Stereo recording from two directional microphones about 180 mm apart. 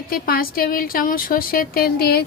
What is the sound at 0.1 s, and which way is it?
A woman's voice, 55° left (ahead or behind).